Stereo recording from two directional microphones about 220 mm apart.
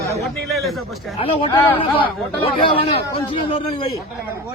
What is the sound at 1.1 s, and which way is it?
Speech, 25° left (ahead or behind).